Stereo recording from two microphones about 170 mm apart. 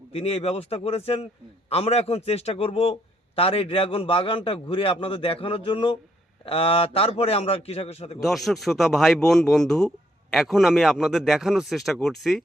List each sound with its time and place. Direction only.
0.1 s a man's voice: 35° left (ahead or behind)
8.2 s speech: centre (ahead or behind)